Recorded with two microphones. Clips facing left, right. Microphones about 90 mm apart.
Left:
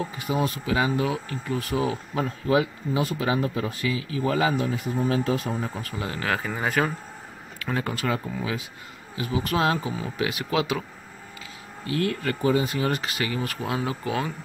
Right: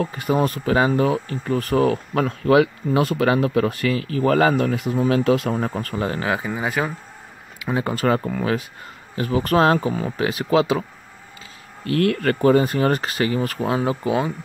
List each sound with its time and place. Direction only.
0.0 s speech: 50° right (ahead or behind); by 5.6 s 85° right
5.6 s speech: 45° right (ahead or behind)
6.2 s speech: 15° right (ahead or behind)
7.5 s a sound: 15° right (ahead or behind)
7.8 s speech: 40° right (ahead or behind)
8.3 s speech: 55° right (ahead or behind)
9.1 s speech: 45° right (ahead or behind)
11.8 s speech: 60° right (ahead or behind); by 14.3 s 25° right (ahead or behind)